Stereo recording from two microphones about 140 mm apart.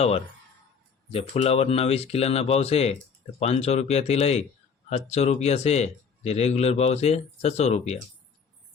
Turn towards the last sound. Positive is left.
turn(degrees=50)  # may be behind; listen again after turning